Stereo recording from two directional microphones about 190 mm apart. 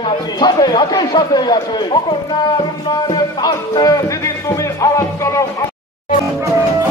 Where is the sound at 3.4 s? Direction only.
20° left (ahead or behind).